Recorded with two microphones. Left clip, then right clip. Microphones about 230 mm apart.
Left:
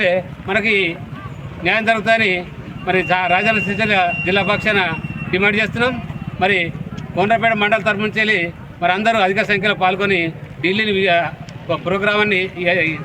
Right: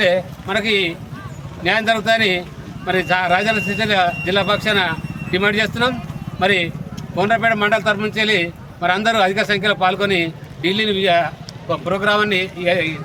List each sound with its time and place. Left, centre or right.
0.0 s a man's voice: centre